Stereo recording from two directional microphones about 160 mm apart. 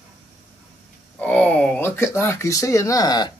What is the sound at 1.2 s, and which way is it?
Speech, 5° left (ahead or behind).